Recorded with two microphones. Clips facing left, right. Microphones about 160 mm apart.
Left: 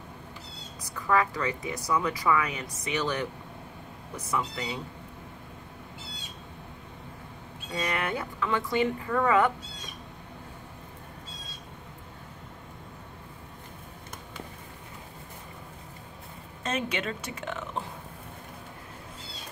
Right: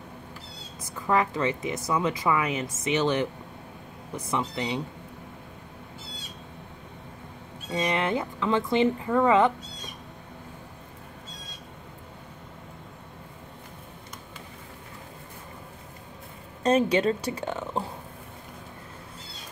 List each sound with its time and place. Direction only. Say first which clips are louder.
0.9 s a woman's voice: right 1 dB; 20° right (ahead or behind)
4.3 s a woman's voice: right 3 dB; 25° right (ahead or behind)
7.7 s a woman's voice: right 5 dB; 20° right (ahead or behind)
16.6 s a woman's voice: right 10 dB; 35° right (ahead or behind)